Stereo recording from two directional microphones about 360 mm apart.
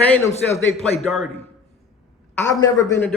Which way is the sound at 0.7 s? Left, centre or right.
Centre.